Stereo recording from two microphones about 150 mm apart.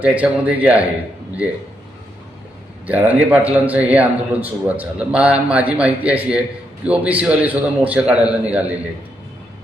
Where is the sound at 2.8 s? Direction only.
10° right (ahead or behind).